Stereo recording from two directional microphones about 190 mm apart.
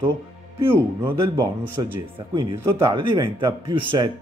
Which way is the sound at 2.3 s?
25° right (ahead or behind).